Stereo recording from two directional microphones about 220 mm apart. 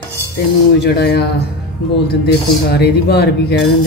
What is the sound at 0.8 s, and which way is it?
Speech, 45° left (ahead or behind).